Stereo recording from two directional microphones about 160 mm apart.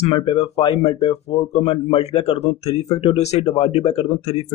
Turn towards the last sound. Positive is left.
turn(degrees=40)  # may be behind; listen again after turning